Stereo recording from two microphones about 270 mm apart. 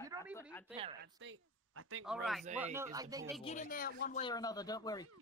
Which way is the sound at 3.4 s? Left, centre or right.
Left.